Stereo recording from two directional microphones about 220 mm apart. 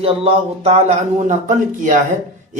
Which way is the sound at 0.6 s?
30° right (ahead or behind).